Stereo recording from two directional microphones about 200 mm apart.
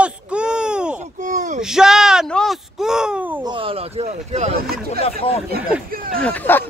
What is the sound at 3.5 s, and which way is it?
Speech, 25° right (ahead or behind).